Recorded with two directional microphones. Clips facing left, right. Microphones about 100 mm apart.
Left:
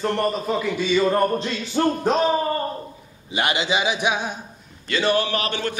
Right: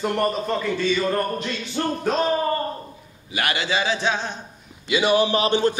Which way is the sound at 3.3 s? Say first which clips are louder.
Left 2 dB; 20° left (ahead or behind).